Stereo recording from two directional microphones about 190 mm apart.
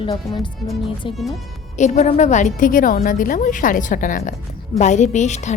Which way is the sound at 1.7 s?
40° left (ahead or behind).